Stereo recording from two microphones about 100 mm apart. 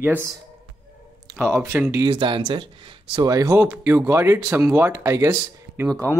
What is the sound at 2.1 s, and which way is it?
Speech, 50° right (ahead or behind).